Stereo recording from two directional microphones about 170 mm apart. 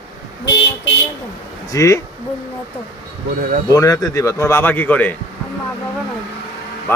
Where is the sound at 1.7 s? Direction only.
20° left (ahead or behind).